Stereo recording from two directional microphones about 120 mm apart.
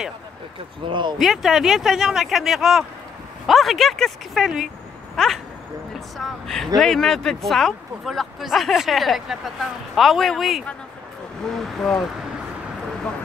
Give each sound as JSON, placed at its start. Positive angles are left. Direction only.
{"t": 0.8, "sound": "speech", "side_deg": -40}
{"t": 1.1, "sound": "speech", "side_deg": 0}